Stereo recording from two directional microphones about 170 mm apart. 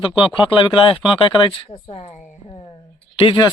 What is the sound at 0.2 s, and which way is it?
Speech, 30° left (ahead or behind).